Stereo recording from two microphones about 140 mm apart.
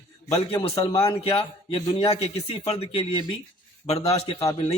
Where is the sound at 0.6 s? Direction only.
40° left (ahead or behind).